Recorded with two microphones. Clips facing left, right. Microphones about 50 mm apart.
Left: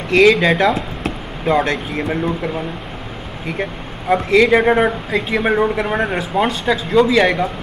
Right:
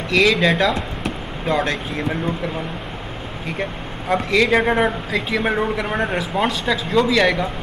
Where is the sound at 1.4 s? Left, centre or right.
Centre.